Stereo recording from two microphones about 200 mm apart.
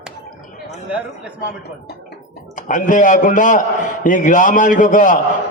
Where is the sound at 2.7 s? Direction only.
40° left (ahead or behind).